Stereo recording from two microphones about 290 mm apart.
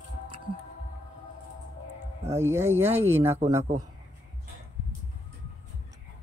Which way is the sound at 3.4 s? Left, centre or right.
Right.